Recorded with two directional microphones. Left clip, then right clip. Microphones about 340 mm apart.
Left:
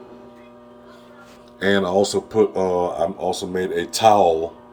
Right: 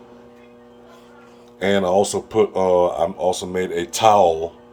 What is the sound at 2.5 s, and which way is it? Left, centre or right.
Speech, right.